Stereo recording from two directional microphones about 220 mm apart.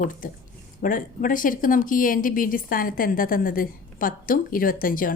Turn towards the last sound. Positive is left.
turn(degrees=40)  # may be behind; listen again after turning